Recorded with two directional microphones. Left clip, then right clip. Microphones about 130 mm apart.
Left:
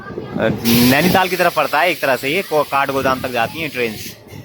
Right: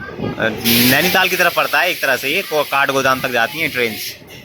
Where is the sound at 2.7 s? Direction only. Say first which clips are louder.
Right 2 dB; 10° left (ahead or behind).